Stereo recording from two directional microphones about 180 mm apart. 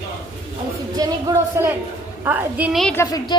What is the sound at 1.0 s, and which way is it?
Speech, 15° right (ahead or behind).